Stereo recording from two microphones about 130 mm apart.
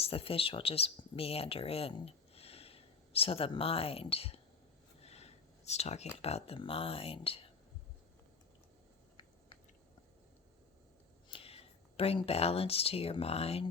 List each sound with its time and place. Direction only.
0.0 s speech: 45° left (ahead or behind)
5.0 s a sound: 55° left (ahead or behind)
6.2 s speech: 50° left (ahead or behind)
11.3 s speech: 45° left (ahead or behind)